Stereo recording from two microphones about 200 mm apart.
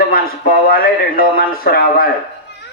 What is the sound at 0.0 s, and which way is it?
A man's voice, 45° left (ahead or behind).